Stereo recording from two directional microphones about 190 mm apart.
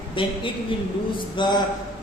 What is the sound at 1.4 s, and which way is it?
Speech, 20° left (ahead or behind).